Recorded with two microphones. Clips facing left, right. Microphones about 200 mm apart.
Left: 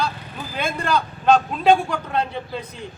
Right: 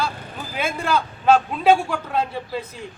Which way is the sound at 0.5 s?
5° right (ahead or behind).